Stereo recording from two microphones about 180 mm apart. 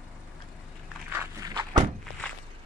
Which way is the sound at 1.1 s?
20° right (ahead or behind).